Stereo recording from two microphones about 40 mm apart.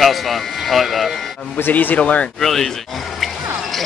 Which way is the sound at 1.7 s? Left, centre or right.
Left.